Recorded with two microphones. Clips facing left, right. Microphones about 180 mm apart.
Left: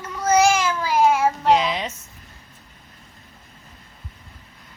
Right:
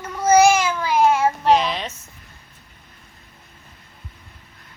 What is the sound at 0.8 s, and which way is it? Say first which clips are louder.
Babbling: even; 5° left (ahead or behind).